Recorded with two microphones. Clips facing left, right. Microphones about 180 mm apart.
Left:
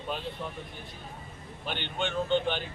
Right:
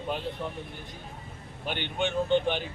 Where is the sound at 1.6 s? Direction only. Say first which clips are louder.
Right 3 dB; 15° right (ahead or behind).